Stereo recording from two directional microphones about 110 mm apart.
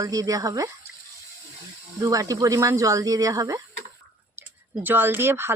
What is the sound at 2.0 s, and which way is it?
Speech, 30° right (ahead or behind).